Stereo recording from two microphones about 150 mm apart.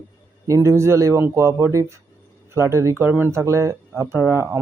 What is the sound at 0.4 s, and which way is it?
Speech, 20° right (ahead or behind).